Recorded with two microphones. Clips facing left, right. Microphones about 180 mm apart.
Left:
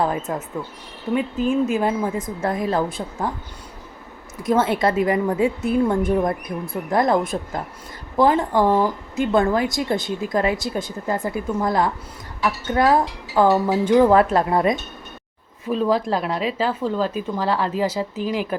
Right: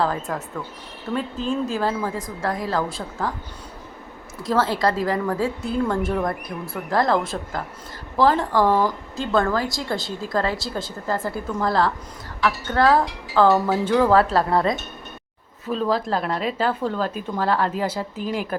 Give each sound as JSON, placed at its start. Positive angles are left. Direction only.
{"t": 0.0, "sound": "speech", "side_deg": 20}
{"t": 4.4, "sound": "speech", "side_deg": 20}